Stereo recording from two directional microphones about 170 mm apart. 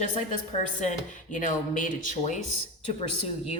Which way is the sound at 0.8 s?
45° left (ahead or behind).